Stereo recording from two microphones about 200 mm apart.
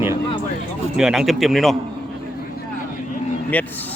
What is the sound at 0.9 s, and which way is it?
Speech, centre (ahead or behind).